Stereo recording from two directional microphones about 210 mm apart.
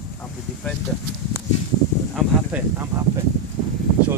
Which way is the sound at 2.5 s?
10° right (ahead or behind).